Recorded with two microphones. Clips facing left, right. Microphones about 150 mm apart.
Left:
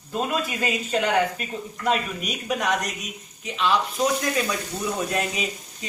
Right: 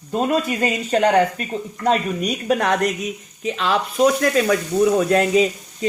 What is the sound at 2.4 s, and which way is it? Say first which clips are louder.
Speech: right 6 dB; 60° right (ahead or behind).